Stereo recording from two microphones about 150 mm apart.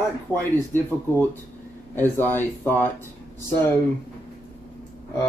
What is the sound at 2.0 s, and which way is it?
Speech, 15° left (ahead or behind).